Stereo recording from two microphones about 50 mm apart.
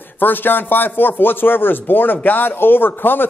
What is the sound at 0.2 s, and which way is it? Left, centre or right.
Speech, left.